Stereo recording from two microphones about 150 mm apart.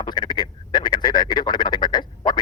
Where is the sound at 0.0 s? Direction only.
30° left (ahead or behind).